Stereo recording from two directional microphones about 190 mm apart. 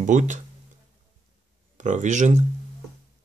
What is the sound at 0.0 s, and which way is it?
Speech, 40° right (ahead or behind).